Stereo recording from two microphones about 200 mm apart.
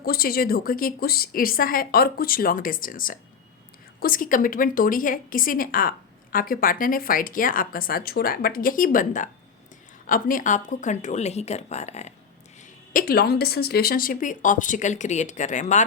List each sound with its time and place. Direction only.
0.0 s a woman's voice: 50° left (ahead or behind); by 12.1 s 35° left (ahead or behind)
12.9 s a woman's voice: 45° left (ahead or behind)